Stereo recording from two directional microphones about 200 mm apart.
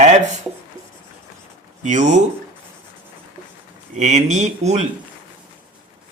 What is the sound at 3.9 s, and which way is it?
Speech, 35° right (ahead or behind).